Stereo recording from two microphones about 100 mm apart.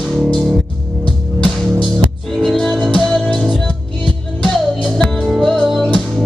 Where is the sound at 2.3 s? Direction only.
5° left (ahead or behind).